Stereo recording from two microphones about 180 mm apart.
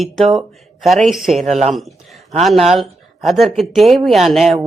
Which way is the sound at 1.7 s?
Centre (ahead or behind).